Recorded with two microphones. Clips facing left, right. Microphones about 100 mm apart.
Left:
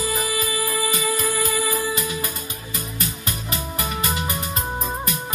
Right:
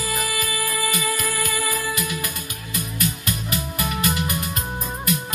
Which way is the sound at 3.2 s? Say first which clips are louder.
Right 2 dB; 30° left (ahead or behind).